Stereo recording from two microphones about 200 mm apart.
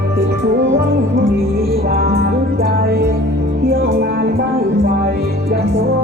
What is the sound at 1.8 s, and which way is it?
Music, 50° right (ahead or behind).